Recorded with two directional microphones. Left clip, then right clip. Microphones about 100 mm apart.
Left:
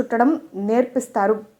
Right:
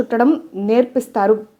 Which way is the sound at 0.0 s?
10° right (ahead or behind).